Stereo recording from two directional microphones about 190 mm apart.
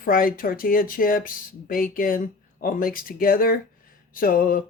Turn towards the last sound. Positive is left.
turn(degrees=50)  # may be behind; listen again after turning